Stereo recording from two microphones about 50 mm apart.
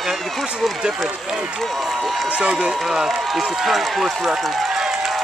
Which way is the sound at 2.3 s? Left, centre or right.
Right.